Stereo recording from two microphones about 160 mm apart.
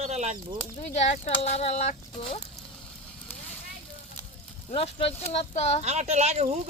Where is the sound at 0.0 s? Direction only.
45° right (ahead or behind).